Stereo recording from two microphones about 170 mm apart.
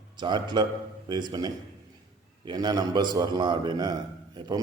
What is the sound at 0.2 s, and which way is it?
A man's voice, 25° right (ahead or behind).